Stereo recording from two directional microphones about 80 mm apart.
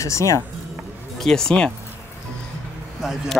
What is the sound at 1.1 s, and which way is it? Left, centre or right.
Speech, centre.